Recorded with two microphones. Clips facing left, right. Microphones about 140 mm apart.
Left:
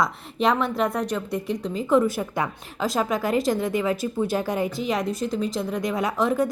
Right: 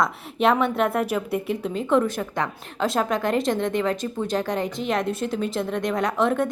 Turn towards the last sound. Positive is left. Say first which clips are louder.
# right 1 dB
turn(degrees=0)  # may be behind; listen again after turning